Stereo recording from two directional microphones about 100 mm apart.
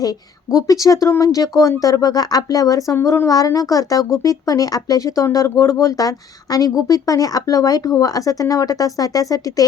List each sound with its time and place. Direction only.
0.0 s speech: 35° left (ahead or behind)